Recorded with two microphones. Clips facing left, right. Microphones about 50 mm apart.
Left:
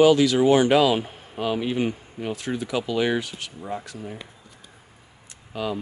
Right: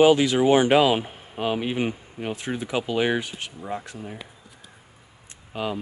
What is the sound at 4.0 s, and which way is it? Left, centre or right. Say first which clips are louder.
Speech: left 1 dB; centre.